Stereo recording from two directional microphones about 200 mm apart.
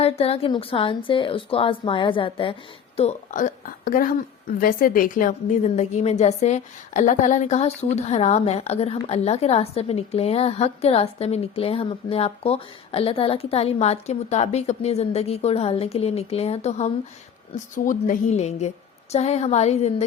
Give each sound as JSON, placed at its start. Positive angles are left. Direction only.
{"t": 0.0, "sound": "a woman's voice", "side_deg": 30}